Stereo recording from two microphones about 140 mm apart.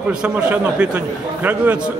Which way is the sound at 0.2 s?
10° right (ahead or behind).